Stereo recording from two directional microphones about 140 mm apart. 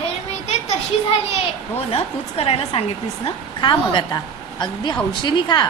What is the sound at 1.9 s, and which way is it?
A woman's voice, 45° left (ahead or behind).